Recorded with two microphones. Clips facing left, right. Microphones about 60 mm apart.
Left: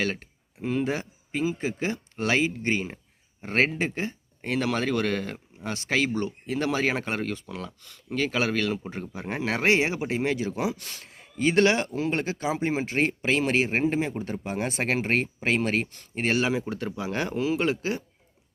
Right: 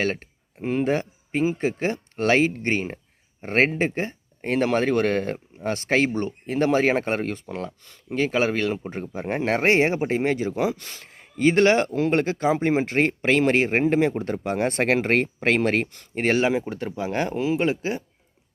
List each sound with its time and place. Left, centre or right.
0.0 s speech: right
16.1 s speech: right